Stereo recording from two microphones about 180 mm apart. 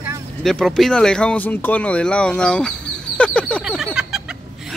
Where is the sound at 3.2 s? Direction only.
5° left (ahead or behind).